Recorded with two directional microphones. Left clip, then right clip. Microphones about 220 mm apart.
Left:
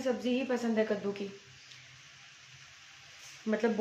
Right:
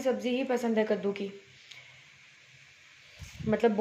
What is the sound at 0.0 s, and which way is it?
A woman's voice, 15° right (ahead or behind).